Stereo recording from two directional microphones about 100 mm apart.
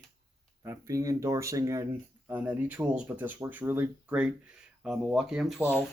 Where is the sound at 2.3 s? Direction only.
15° right (ahead or behind).